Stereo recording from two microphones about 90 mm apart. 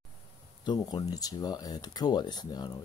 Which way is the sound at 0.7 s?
50° left (ahead or behind).